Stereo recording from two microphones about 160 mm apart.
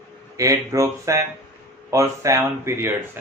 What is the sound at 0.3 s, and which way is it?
Speech, 20° right (ahead or behind).